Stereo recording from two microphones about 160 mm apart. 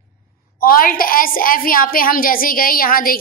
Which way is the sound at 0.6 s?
65° left (ahead or behind).